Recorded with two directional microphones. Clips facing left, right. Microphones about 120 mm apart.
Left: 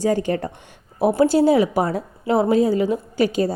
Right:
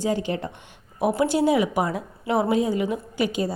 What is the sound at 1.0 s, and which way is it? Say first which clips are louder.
A woman's voice: left 5 dB; 30° left (ahead or behind).